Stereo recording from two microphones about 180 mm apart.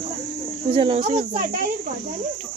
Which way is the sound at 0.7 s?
30° right (ahead or behind).